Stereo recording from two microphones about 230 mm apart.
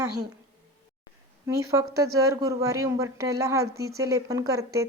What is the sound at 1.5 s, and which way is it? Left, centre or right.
A woman's voice, centre.